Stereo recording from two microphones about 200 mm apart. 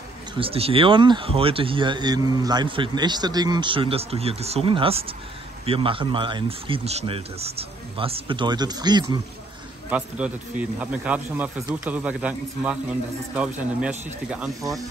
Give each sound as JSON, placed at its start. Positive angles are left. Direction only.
{"t": 0.4, "sound": "speech", "side_deg": -30}
{"t": 9.8, "sound": "a man's voice", "side_deg": -5}
{"t": 14.6, "sound": "a man's voice", "side_deg": -15}